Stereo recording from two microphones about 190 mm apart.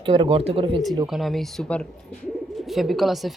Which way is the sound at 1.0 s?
Centre (ahead or behind).